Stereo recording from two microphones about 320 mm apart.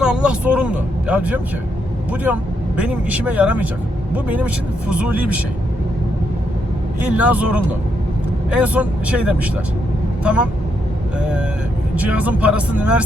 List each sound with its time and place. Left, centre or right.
0.0 s speech: centre
7.0 s speech: centre
11.2 s speech: centre